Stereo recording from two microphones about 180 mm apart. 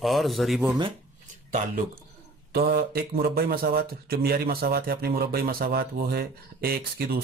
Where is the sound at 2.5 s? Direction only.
60° right (ahead or behind).